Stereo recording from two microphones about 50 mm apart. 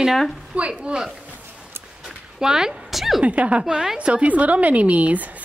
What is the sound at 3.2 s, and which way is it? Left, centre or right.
A woman's voice, right.